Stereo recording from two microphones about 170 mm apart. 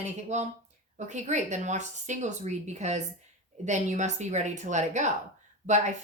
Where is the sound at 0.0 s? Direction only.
40° right (ahead or behind).